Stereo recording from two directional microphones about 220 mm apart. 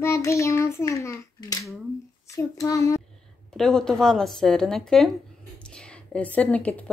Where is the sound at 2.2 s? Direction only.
15° left (ahead or behind).